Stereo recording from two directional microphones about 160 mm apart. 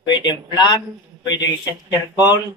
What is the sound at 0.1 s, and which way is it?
Speech, 25° left (ahead or behind).